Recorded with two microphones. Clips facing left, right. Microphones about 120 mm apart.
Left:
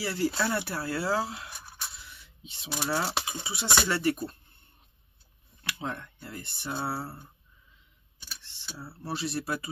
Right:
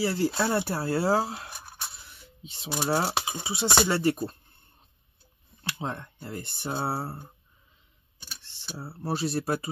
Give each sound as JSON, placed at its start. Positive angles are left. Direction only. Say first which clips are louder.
{"t": 0.0, "sound": "speech", "louder": "right 3 dB", "side_deg": -30}
{"t": 2.1, "sound": "a sound", "louder": "right 3 dB", "side_deg": -40}
{"t": 2.8, "sound": "speech", "louder": "right 4 dB", "side_deg": -35}
{"t": 3.4, "sound": "speech", "louder": "right 4 dB", "side_deg": -25}
{"t": 5.6, "sound": "speech", "louder": "right 2 dB", "side_deg": -30}